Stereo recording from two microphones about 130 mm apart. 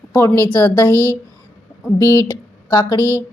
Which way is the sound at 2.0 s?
25° left (ahead or behind).